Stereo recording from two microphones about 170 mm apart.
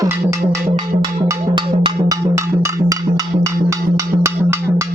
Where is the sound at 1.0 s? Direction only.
25° right (ahead or behind).